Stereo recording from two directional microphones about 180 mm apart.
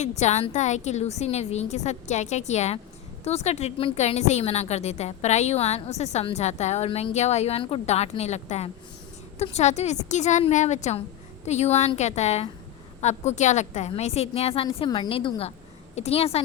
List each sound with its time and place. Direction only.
0.0 s a woman's voice: 40° left (ahead or behind)